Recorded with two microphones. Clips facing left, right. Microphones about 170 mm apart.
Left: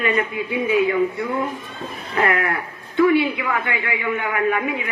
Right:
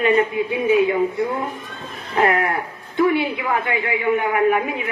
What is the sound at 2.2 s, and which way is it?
A woman's voice, 25° right (ahead or behind).